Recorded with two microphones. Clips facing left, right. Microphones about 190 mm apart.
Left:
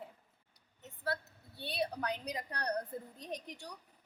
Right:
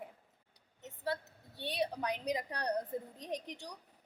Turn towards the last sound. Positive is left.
turn(degrees=-20)  # may be behind; listen again after turning